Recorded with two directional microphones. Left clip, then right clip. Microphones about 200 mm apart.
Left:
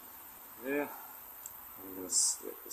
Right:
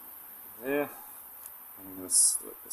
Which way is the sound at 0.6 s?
55° right (ahead or behind).